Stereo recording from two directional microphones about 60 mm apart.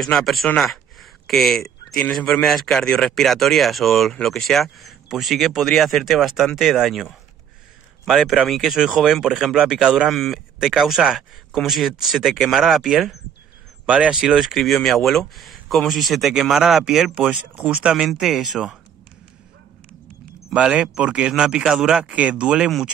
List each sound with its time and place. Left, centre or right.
0.0 s speech: centre
10.0 s speech: centre
10.6 s speech: centre
13.8 s speech: right
14.2 s speech: centre
17.6 s speech: centre
20.5 s speech: centre